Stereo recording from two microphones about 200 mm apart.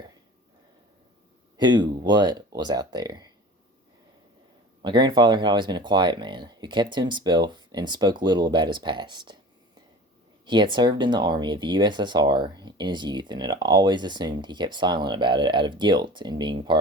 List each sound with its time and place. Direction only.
1.5 s speech: 20° right (ahead or behind)
4.8 s speech: 20° right (ahead or behind)
10.4 s speech: 20° right (ahead or behind)